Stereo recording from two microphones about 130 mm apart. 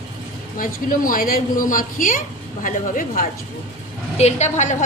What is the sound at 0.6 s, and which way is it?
Speech, 90° left.